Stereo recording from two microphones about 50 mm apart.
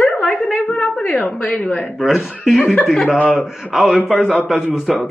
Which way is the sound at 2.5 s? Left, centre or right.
Centre.